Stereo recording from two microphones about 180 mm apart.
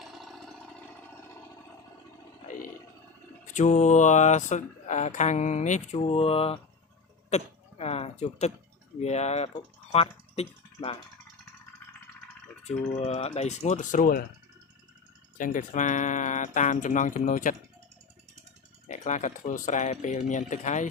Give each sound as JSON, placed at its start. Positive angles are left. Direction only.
{"t": 0.0, "sound": "engine", "side_deg": 0}
{"t": 3.4, "sound": "speech", "side_deg": 45}
{"t": 7.3, "sound": "a sound", "side_deg": 35}
{"t": 8.2, "sound": "speech", "side_deg": 40}
{"t": 12.6, "sound": "speech", "side_deg": 35}
{"t": 15.4, "sound": "speech", "side_deg": 45}
{"t": 18.9, "sound": "speech", "side_deg": 40}